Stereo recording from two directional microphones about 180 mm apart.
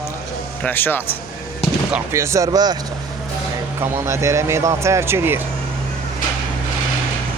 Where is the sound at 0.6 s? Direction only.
10° left (ahead or behind).